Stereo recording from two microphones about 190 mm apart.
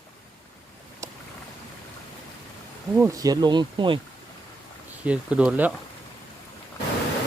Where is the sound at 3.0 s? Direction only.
15° right (ahead or behind).